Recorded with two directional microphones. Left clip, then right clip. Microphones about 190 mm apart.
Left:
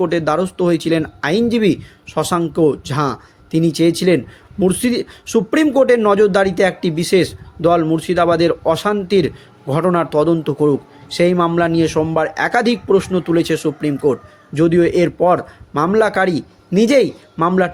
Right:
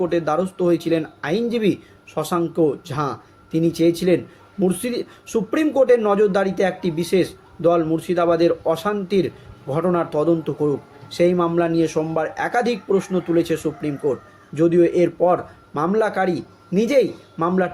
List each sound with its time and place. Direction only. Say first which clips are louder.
0.0 s speech: left 4 dB; 45° left (ahead or behind)